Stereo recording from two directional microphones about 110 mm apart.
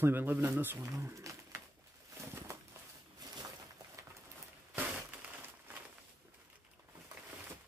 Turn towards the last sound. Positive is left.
turn(degrees=-15)  # may be behind; listen again after turning